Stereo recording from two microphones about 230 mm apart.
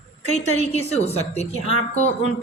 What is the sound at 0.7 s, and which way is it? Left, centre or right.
Speech, left.